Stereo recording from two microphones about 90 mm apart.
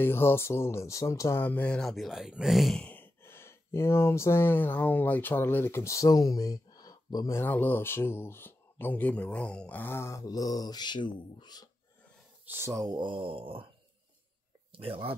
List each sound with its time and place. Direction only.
0.0 s speech: 25° left (ahead or behind)
1.4 s speech: 20° left (ahead or behind)
1.8 s speech: centre (ahead or behind)
2.8 s speech: 20° left (ahead or behind); by 7.3 s 45° left (ahead or behind)
7.3 s speech: 20° left (ahead or behind)
10.2 s speech: 45° left (ahead or behind)
12.5 s speech: 30° right (ahead or behind)
12.8 s mantra: 50° right (ahead or behind)
13.2 s mantra: 85° right
14.7 s speech: 90° right